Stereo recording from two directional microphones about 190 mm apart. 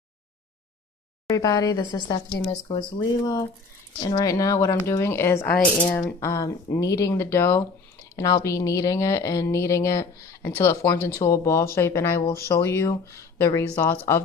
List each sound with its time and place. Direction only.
1.3 s speech: 20° left (ahead or behind)
6.1 s speech: 20° left (ahead or behind)